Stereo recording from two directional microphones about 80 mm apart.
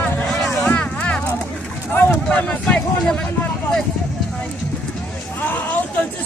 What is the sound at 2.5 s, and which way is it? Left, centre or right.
Speech, centre.